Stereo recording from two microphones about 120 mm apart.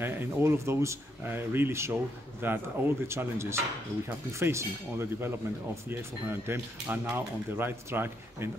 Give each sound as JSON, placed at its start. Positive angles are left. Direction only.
{"t": 0.0, "sound": "speech", "side_deg": -20}